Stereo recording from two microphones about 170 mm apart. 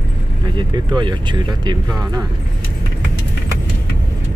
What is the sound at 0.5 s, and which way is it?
Speech, 25° right (ahead or behind).